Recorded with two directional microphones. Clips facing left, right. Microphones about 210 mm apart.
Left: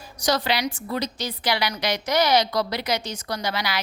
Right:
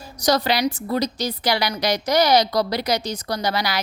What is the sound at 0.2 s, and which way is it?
A woman's voice, 40° right (ahead or behind).